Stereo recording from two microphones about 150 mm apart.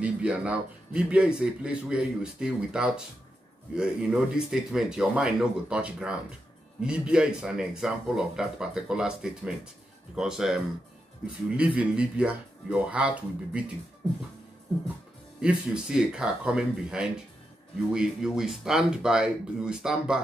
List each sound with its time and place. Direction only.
0.0 s a man's voice: 5° right (ahead or behind)
15.4 s a man's voice: 5° right (ahead or behind)